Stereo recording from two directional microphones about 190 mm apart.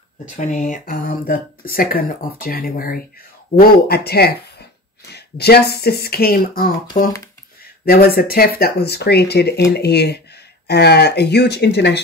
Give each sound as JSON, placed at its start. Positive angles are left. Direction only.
{"t": 0.4, "sound": "speech", "side_deg": 40}